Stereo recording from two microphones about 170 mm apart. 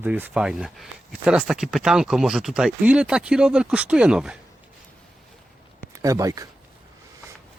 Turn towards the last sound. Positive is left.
turn(degrees=-20)  # may be behind; listen again after turning